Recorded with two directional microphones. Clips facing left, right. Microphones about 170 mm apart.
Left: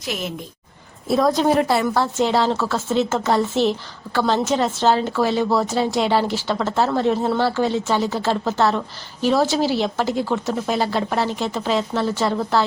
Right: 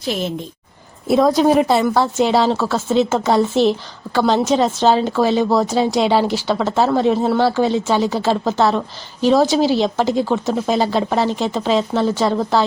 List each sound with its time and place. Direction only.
0.0 s a woman's voice: 30° right (ahead or behind)